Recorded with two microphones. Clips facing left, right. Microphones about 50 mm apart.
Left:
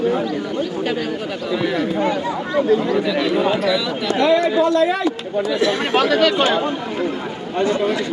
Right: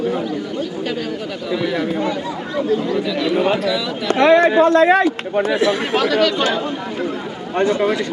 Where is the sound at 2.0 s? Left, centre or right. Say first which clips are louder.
Left 2 dB; left.